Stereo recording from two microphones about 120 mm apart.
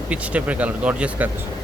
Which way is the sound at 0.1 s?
10° right (ahead or behind).